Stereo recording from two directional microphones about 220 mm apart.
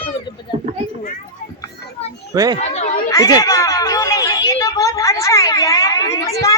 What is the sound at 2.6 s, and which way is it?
Speech, 30° left (ahead or behind).